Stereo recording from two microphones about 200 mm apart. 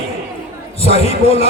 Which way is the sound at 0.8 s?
30° left (ahead or behind).